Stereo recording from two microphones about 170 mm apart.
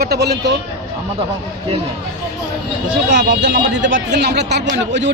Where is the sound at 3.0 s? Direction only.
90° right.